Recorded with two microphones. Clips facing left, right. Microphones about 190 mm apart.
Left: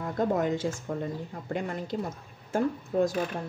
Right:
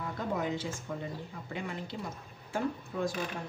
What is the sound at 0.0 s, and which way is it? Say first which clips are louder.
Speech: left 7 dB; 45° left (ahead or behind).